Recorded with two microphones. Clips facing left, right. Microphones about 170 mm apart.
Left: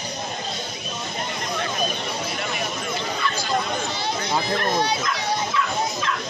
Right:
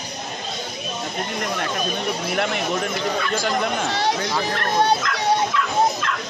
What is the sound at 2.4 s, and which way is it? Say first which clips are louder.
Speech: right 6 dB; 80° right.